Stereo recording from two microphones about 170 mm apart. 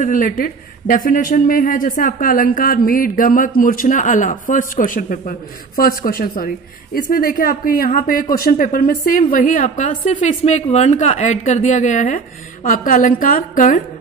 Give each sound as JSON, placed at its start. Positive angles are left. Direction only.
{"t": 0.0, "sound": "a woman's voice", "side_deg": 50}